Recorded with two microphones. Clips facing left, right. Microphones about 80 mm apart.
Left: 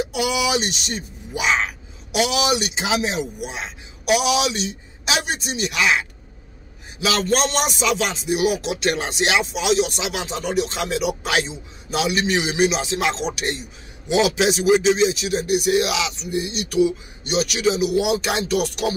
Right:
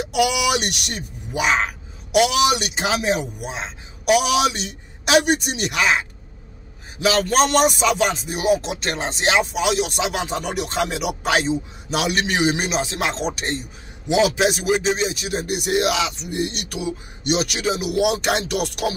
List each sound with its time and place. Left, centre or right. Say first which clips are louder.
0.1 s speech: right 6 dB; right
1.4 s speech: right 1 dB; right
4.0 s speech: right 2 dB; right
11.2 s speech: right 3 dB; right
11.9 s speech: left 1 dB; right
14.3 s speech: left 2 dB; right